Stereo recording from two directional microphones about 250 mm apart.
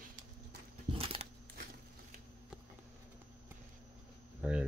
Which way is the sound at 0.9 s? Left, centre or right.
Right.